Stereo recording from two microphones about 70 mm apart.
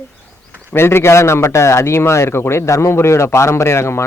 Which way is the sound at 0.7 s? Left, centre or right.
Left.